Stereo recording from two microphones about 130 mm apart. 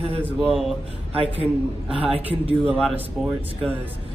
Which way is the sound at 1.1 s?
50° right (ahead or behind).